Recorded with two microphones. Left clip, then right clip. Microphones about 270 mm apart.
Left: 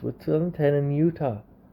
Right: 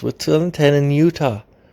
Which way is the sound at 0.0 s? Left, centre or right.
Right.